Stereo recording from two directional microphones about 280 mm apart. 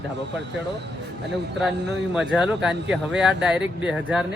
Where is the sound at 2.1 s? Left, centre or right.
Centre.